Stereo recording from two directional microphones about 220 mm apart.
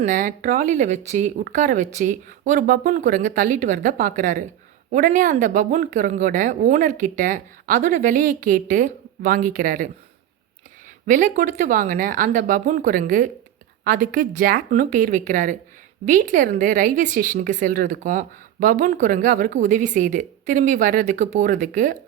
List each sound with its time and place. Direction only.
0.0 s speech: 35° right (ahead or behind)
11.0 s speech: 35° right (ahead or behind)